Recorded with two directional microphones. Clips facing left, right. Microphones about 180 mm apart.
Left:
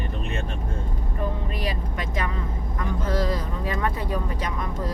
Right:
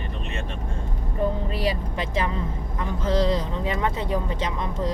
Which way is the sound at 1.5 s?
30° right (ahead or behind).